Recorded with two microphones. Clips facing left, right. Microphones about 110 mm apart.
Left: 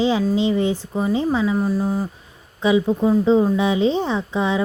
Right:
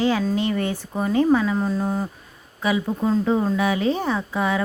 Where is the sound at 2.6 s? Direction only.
20° left (ahead or behind).